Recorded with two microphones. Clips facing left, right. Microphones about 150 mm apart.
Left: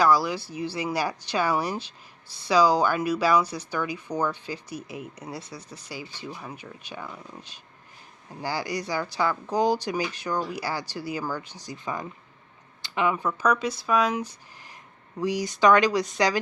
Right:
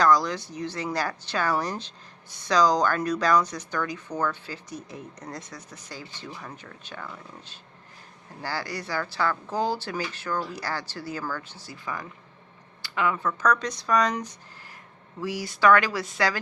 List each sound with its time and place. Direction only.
0.0 s speech: 10° left (ahead or behind)
15.2 s speech: 20° left (ahead or behind)